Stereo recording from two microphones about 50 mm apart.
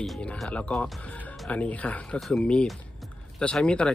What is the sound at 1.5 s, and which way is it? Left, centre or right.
Speech, left.